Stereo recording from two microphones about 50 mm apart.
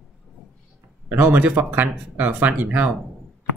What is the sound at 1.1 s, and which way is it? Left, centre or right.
Speech, right.